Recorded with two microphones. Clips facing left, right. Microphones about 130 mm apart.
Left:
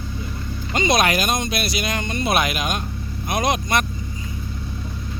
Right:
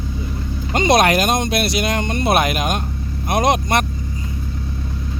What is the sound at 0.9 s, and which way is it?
Speech, 60° right (ahead or behind).